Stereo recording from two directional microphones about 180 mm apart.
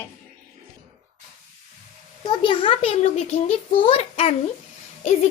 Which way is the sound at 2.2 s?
30° left (ahead or behind).